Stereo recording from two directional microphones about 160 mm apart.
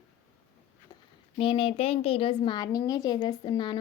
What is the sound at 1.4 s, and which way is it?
A woman's voice, 35° left (ahead or behind).